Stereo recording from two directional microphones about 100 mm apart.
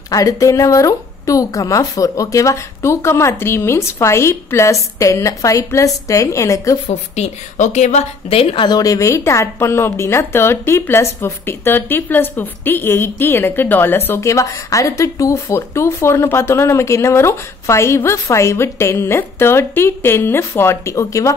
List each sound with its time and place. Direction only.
0.1 s a woman's voice: 35° left (ahead or behind)
7.8 s a woman's voice: 80° left
8.6 s a woman's voice: 35° left (ahead or behind)